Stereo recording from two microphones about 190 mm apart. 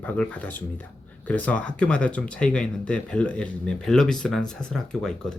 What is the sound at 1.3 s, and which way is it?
Speech, 5° left (ahead or behind).